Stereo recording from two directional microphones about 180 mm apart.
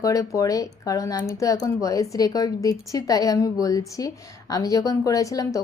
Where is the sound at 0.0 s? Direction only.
20° left (ahead or behind).